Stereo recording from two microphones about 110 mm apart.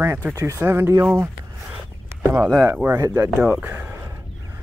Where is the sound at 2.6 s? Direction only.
15° right (ahead or behind).